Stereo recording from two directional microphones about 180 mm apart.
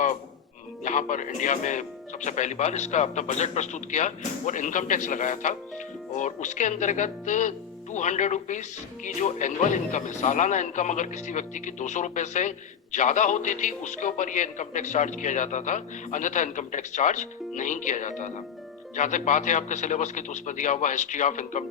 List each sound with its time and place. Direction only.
0.9 s speech: 45° left (ahead or behind)